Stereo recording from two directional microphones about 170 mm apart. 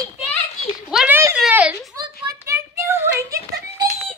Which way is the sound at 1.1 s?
15° right (ahead or behind).